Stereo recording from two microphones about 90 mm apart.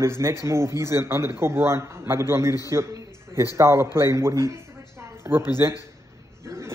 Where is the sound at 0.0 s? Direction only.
30° right (ahead or behind).